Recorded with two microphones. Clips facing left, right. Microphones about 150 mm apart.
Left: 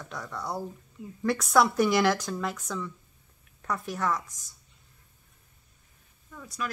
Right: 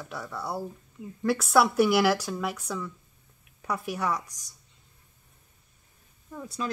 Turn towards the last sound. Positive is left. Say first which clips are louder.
# right 3 dB
turn(degrees=-25)  # may be behind; listen again after turning